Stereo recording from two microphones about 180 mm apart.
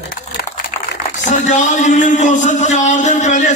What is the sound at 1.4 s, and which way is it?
A man's voice, 40° left (ahead or behind).